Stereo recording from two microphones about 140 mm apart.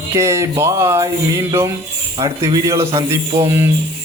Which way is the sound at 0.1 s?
20° right (ahead or behind).